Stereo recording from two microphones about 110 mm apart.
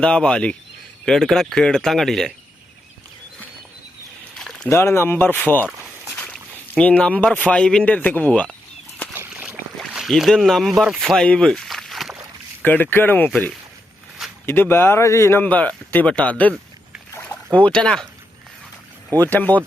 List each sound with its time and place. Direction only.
0.0 s speech: 10° left (ahead or behind)
4.4 s a sound: 5° left (ahead or behind)
4.7 s speech: 20° left (ahead or behind)
9.1 s boat: 15° right (ahead or behind); by 12.1 s centre (ahead or behind)
12.6 s speech: 15° left (ahead or behind)
17.2 s a sound: 10° left (ahead or behind)
19.2 s speech: 15° left (ahead or behind)